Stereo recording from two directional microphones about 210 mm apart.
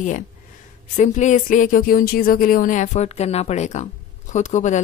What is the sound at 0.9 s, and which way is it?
Speech, 35° left (ahead or behind).